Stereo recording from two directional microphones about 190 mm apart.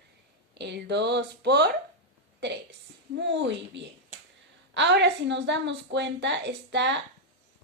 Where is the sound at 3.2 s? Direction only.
70° right (ahead or behind).